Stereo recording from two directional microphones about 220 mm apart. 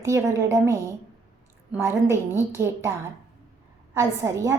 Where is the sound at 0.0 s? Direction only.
15° right (ahead or behind).